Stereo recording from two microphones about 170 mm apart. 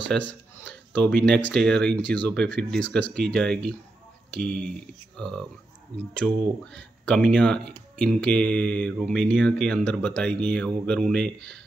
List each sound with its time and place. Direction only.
0.1 s speech: 10° left (ahead or behind)